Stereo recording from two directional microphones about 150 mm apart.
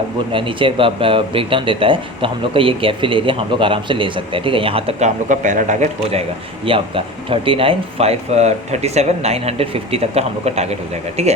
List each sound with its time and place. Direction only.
0.3 s speech: 35° right (ahead or behind)
6.7 s speech: 35° right (ahead or behind)